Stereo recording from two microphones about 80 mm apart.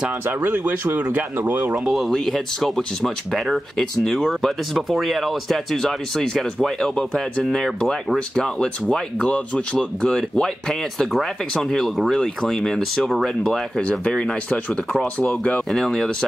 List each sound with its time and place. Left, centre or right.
0.4 s speech: right
1.9 s speech: centre
13.8 s speech: centre